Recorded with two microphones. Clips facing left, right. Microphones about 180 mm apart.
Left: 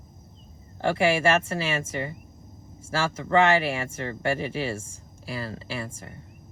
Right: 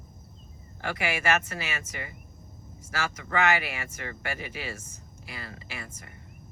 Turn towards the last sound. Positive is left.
turn(degrees=30)  # may be behind; listen again after turning